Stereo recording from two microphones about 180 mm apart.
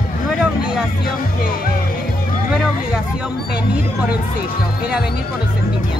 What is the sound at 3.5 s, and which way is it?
Speech, 5° right (ahead or behind).